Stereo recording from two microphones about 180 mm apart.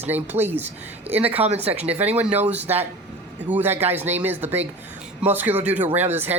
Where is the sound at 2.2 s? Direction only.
10° right (ahead or behind).